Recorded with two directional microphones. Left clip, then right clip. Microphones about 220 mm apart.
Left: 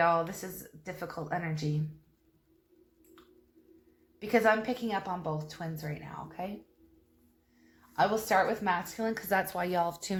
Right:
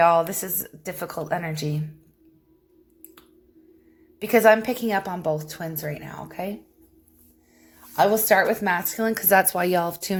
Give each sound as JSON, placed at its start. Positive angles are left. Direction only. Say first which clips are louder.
{"t": 0.0, "sound": "a woman's voice", "louder": "right 9 dB", "side_deg": -50}
{"t": 4.2, "sound": "a woman's voice", "louder": "right 10 dB", "side_deg": -50}
{"t": 7.9, "sound": "a woman's voice", "louder": "right 8 dB", "side_deg": -50}